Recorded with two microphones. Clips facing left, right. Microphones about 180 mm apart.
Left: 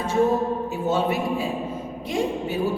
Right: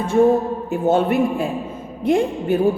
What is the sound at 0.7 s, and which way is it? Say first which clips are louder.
A woman's voice: right 9 dB; 55° right (ahead or behind).